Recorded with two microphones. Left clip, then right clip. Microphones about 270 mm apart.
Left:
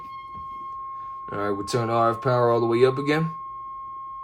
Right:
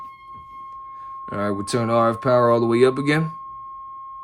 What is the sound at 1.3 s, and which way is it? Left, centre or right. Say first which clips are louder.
Speech: right 2 dB; right.